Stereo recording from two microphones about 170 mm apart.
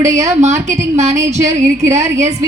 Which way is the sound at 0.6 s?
20° right (ahead or behind).